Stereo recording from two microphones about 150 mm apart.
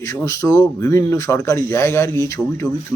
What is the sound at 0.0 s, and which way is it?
Speech, 20° left (ahead or behind).